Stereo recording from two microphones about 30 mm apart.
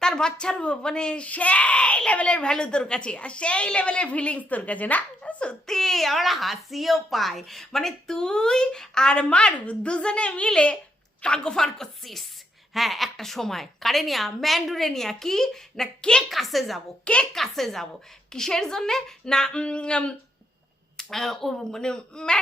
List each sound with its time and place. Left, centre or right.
0.2 s a woman's voice: left
1.2 s a woman's voice: left
4.4 s a woman's voice: left
5.6 s a woman's voice: centre
9.0 s a woman's voice: left
11.5 s a woman's voice: centre
12.7 s a woman's voice: centre
16.0 s a woman's voice: left
16.3 s a woman's voice: centre; by 19.5 s left
19.5 s a woman's voice: left
21.1 s a woman's voice: centre
21.5 s a woman's voice: centre